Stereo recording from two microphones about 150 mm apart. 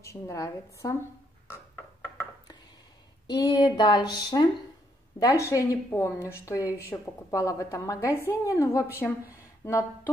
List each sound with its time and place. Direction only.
0.0 s a woman's voice: 20° left (ahead or behind)
3.3 s a woman's voice: 30° left (ahead or behind)